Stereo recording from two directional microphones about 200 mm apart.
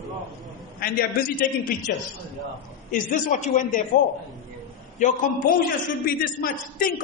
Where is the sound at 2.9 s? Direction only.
40° left (ahead or behind).